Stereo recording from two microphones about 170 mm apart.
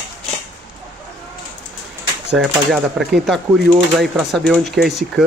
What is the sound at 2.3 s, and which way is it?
Speech, 5° right (ahead or behind).